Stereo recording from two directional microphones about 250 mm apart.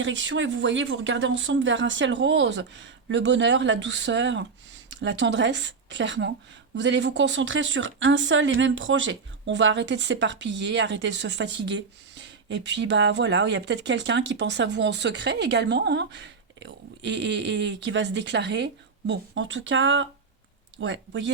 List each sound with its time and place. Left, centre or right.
0.0 s speech: right